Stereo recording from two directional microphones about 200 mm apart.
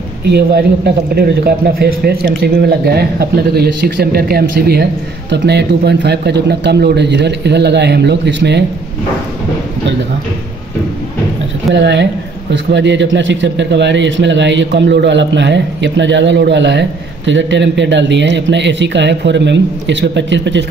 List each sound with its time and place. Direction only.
0.3 s a man's voice: 55° right (ahead or behind)
11.7 s a man's voice: 60° right (ahead or behind)